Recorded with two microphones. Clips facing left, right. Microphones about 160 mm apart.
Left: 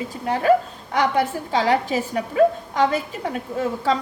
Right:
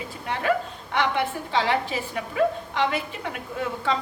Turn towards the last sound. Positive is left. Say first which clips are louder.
# left 5 dB
turn(degrees=40)  # may be behind; listen again after turning